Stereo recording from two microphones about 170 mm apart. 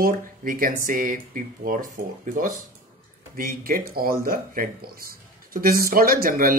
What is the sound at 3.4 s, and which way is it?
Speech, 55° right (ahead or behind).